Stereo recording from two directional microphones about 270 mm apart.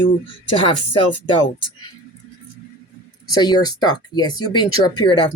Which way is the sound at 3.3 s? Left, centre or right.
Centre.